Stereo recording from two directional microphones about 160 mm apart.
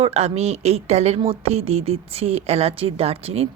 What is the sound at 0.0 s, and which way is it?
Speech, 40° right (ahead or behind).